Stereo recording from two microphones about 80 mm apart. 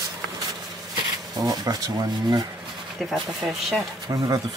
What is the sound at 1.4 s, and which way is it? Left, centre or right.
Speech, right.